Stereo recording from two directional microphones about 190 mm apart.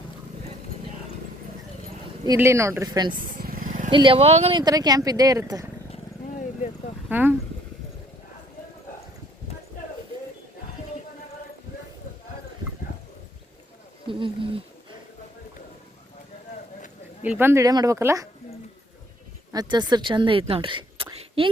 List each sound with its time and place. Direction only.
2.2 s speech: 15° right (ahead or behind)
3.4 s vehicle: 50° right (ahead or behind)
3.9 s speech: 25° right (ahead or behind)
4.6 s speech: 20° right (ahead or behind)
7.1 s speech: 10° right (ahead or behind)
14.1 s a sound: 25° right (ahead or behind)
17.2 s speech: 10° right (ahead or behind)
19.5 s speech: 20° right (ahead or behind)